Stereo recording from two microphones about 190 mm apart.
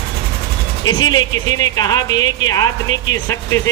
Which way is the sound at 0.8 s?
20° left (ahead or behind).